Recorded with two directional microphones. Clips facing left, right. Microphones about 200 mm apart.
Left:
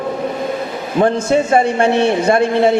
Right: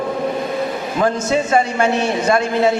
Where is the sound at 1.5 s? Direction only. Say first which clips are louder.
Left 2 dB; 30° left (ahead or behind).